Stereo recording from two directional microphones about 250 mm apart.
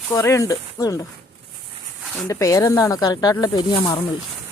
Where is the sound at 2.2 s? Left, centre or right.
Centre.